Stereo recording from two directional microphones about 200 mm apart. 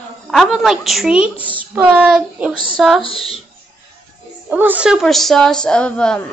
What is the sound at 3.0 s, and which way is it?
Speech, 25° left (ahead or behind).